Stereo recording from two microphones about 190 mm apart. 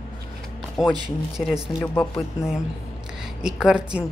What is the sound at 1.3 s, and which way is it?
Speech, centre (ahead or behind).